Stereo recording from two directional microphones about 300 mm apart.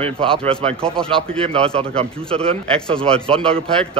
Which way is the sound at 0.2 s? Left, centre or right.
Centre.